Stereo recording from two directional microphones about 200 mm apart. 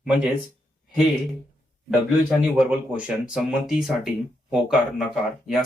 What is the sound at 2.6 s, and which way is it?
Speech, 5° right (ahead or behind).